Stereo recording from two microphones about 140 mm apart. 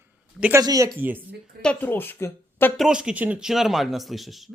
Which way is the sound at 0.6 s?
25° right (ahead or behind).